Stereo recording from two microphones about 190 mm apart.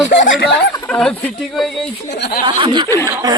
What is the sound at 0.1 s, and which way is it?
Speech, 70° left (ahead or behind).